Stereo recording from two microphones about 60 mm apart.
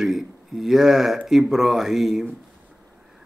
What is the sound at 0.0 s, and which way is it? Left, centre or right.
Speech, centre.